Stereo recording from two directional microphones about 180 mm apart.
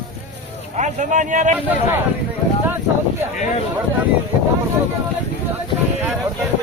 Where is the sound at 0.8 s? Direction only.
45° right (ahead or behind).